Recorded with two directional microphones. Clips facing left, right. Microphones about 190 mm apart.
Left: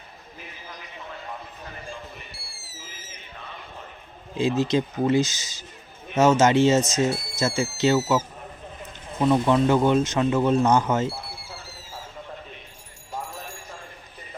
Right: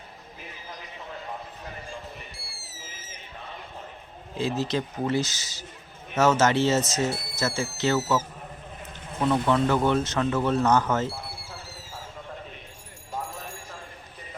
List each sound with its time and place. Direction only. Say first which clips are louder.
4.4 s speech: left 5 dB; 15° left (ahead or behind)
9.2 s speech: left 3 dB; 15° left (ahead or behind)